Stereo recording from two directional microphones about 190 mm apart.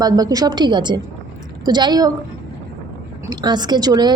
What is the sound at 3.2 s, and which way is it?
Speech, 20° right (ahead or behind).